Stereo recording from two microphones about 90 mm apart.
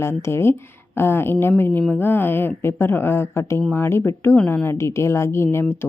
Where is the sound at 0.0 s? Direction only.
30° left (ahead or behind).